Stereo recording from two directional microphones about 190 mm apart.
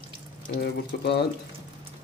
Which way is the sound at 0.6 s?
65° left (ahead or behind).